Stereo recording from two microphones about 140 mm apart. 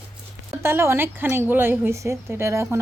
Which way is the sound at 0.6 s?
20° right (ahead or behind).